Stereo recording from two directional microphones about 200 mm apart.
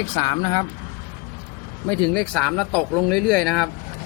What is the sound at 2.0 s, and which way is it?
Speech, 5° left (ahead or behind).